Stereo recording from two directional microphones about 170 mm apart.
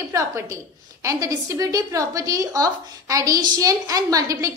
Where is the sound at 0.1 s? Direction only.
15° right (ahead or behind).